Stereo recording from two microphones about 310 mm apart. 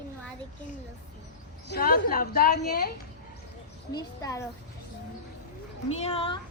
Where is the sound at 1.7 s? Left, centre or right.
Left.